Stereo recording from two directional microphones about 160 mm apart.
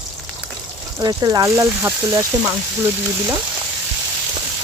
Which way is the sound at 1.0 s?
25° right (ahead or behind).